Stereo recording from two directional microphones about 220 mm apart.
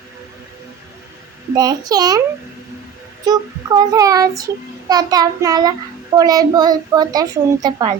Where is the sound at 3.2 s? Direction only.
15° right (ahead or behind).